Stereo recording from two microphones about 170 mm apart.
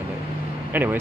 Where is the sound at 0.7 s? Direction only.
10° right (ahead or behind).